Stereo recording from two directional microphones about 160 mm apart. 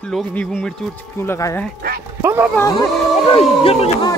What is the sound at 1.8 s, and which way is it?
Speech, 75° right (ahead or behind).